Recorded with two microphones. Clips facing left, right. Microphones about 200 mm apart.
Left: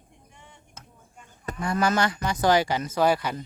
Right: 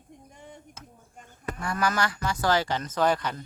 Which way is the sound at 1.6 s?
25° left (ahead or behind).